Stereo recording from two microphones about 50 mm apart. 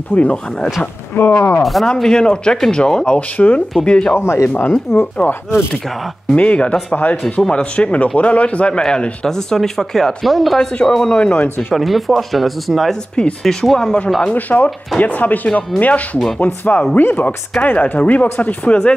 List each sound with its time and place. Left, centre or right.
0.1 s speech: left
1.1 s speech: left
1.6 s speech: centre
2.0 s speech: centre
3.2 s speech: left
3.8 s speech: centre
4.1 s speech: left
6.3 s speech: left; by 10.6 s centre
10.6 s speech: centre
11.7 s speech: centre
13.1 s speech: centre
14.2 s speech: left